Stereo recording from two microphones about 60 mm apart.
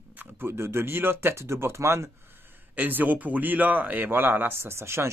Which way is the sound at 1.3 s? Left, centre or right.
Right.